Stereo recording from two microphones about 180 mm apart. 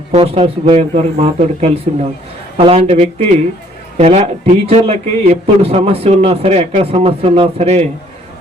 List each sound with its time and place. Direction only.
0.1 s a man's voice: 30° right (ahead or behind)